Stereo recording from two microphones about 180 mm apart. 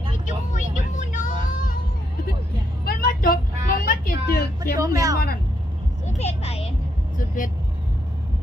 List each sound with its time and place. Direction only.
0.3 s vehicle: 45° left (ahead or behind)
2.8 s vehicle: 55° left (ahead or behind)
4.8 s speech: 20° right (ahead or behind)
6.1 s a sound: 35° left (ahead or behind)
7.2 s vehicle: 50° left (ahead or behind)